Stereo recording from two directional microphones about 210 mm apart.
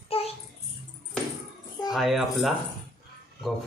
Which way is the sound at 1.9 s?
Centre (ahead or behind).